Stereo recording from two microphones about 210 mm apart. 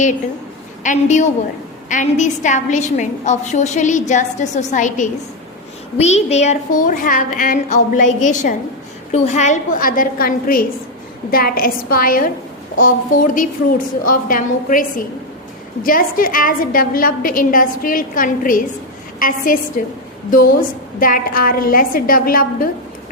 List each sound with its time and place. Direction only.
0.9 s a woman's voice: 35° left (ahead or behind)
21.0 s a woman's voice: 40° left (ahead or behind)